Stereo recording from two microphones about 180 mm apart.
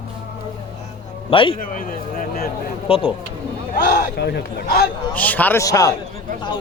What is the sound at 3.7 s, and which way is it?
Speech, 65° left (ahead or behind).